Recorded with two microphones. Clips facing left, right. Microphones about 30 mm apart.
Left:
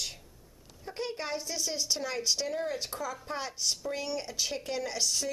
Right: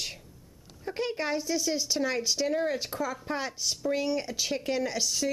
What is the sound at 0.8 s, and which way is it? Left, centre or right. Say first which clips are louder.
A woman's voice: right 5 dB; right.